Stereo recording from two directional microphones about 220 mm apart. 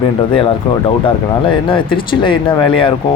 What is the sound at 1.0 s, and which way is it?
Speech, 20° left (ahead or behind).